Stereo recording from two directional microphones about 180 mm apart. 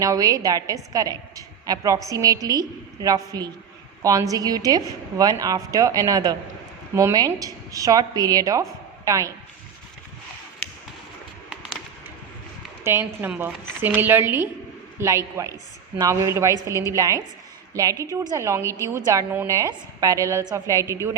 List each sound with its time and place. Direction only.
0.0 s a woman's voice: 20° right (ahead or behind)
12.8 s a woman's voice: 15° right (ahead or behind)